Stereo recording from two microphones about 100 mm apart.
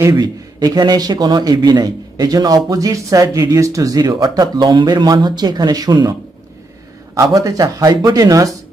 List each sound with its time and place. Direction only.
0.1 s a man's voice: 45° right (ahead or behind)
7.2 s a man's voice: 35° right (ahead or behind)